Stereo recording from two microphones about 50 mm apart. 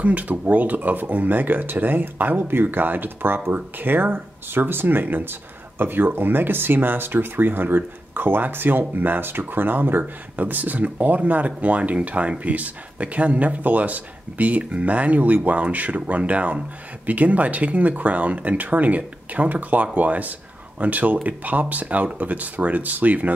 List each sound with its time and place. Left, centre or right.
0.0 s speech: right